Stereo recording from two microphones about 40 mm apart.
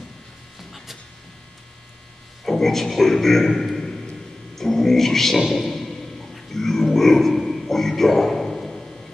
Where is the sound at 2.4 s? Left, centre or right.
Centre.